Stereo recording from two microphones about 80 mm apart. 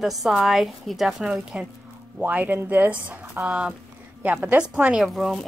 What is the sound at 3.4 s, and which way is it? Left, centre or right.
Speech, centre.